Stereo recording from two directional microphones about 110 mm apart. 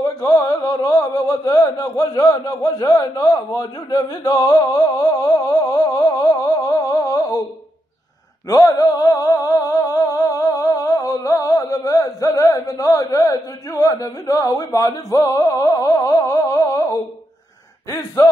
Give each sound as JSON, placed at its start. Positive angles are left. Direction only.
{"t": 0.0, "sound": "a sound", "side_deg": 30}
{"t": 8.5, "sound": "music", "side_deg": 35}
{"t": 18.2, "sound": "speech", "side_deg": 25}